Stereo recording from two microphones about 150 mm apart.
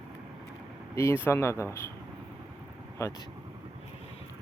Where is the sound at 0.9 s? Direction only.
15° left (ahead or behind).